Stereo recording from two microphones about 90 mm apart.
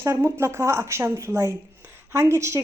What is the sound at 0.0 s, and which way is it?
A woman's voice, 30° right (ahead or behind).